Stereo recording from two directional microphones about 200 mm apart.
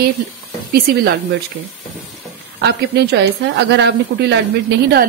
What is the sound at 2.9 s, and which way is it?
A woman's voice, 55° right (ahead or behind).